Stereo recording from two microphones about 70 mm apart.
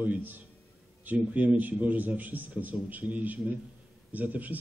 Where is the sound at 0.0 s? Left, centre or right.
Right.